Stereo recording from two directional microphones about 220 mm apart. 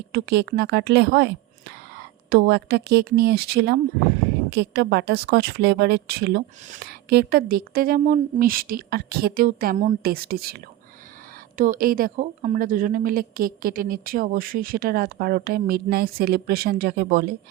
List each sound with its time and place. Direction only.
0.1 s a woman's voice: 50° right (ahead or behind)
2.3 s a woman's voice: 45° right (ahead or behind)